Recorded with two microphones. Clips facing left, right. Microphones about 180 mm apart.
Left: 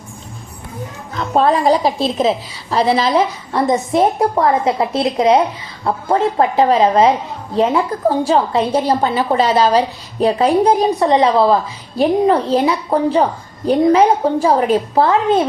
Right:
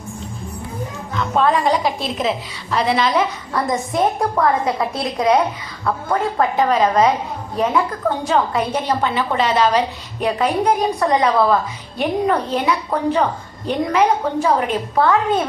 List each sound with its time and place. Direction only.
1.1 s a woman's voice: 35° left (ahead or behind)